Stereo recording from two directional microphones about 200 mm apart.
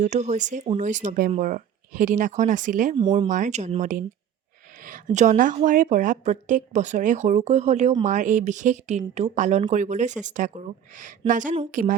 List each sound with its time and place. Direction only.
0.0 s a woman's voice: 35° right (ahead or behind)
2.9 s speech: 25° right (ahead or behind)
3.2 s a woman's voice: 40° right (ahead or behind)